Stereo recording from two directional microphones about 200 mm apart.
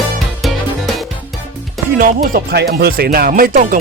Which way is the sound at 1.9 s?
45° right (ahead or behind).